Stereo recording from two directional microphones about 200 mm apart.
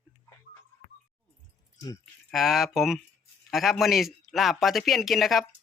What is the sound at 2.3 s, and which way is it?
Speech, centre (ahead or behind).